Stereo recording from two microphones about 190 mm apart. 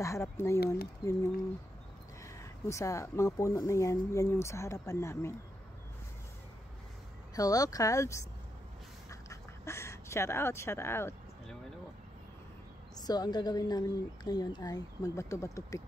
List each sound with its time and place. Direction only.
0.0 s speech: 15° left (ahead or behind)
2.2 s speech: 15° left (ahead or behind)
7.3 s speech: 20° left (ahead or behind)
9.1 s duck: 15° left (ahead or behind)
12.9 s a woman's voice: 20° left (ahead or behind)